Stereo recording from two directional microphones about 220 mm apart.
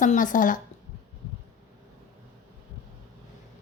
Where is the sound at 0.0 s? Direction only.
35° left (ahead or behind).